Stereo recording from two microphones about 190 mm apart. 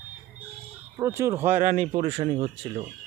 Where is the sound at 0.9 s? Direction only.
15° right (ahead or behind).